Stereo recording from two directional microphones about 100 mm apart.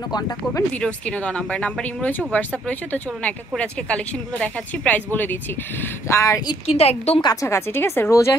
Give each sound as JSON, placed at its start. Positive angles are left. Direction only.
{"t": 0.7, "sound": "speech", "side_deg": 15}
{"t": 6.7, "sound": "a woman's voice", "side_deg": 90}
{"t": 7.4, "sound": "speech", "side_deg": 25}